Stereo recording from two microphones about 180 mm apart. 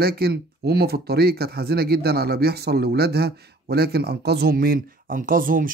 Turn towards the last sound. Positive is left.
turn(degrees=-50)  # may be behind; listen again after turning